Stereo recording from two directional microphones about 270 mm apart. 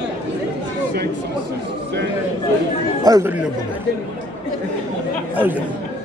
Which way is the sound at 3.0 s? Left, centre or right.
Centre.